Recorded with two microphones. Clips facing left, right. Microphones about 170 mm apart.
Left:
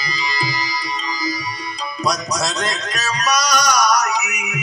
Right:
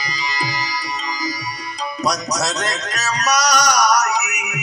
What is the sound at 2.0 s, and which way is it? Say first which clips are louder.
Speech: even; 75° right (ahead or behind).